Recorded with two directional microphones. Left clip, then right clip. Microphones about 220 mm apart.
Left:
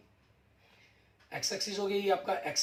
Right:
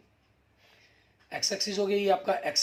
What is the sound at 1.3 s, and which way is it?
Speech, 50° right (ahead or behind).